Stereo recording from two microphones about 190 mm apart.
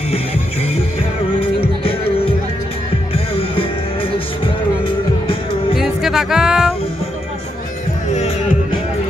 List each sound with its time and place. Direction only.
1.4 s music: 30° left (ahead or behind)
3.3 s music: 30° left (ahead or behind)
5.8 s music: centre (ahead or behind)